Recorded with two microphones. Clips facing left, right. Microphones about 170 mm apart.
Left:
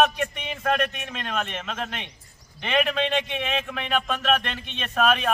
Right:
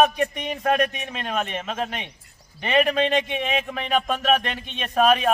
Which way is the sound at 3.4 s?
5° right (ahead or behind).